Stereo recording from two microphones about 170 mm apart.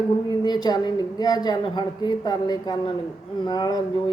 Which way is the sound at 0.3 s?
25° left (ahead or behind).